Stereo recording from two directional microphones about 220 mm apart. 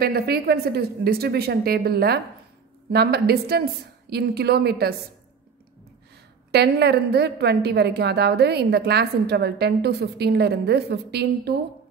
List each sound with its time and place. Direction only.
0.0 s a woman's voice: 45° right (ahead or behind)
6.5 s a woman's voice: 50° right (ahead or behind)